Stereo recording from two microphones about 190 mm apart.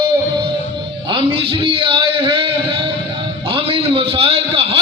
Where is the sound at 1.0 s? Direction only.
30° right (ahead or behind).